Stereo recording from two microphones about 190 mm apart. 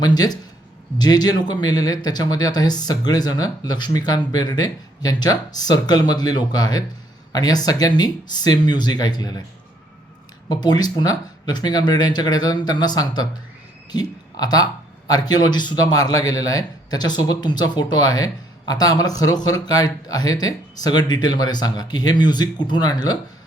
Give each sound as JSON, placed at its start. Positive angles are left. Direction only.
{"t": 0.0, "sound": "speech", "side_deg": 20}
{"t": 10.5, "sound": "speech", "side_deg": 20}